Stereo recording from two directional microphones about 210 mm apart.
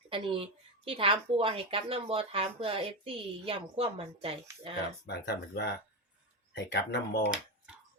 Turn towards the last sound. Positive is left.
turn(degrees=55)  # may be behind; listen again after turning